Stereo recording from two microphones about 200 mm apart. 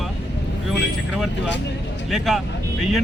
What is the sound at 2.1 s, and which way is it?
Speech, centre (ahead or behind).